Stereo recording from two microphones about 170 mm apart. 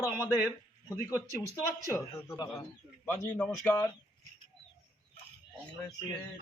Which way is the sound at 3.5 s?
20° left (ahead or behind).